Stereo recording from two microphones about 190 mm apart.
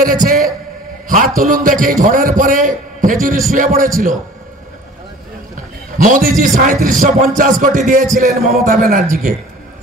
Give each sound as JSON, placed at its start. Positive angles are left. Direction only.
{"t": 0.0, "sound": "a man's voice", "side_deg": -45}
{"t": 5.9, "sound": "a man's voice", "side_deg": -45}